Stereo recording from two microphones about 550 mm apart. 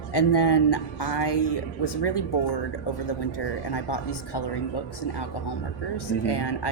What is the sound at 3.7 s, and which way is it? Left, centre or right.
Speech, left.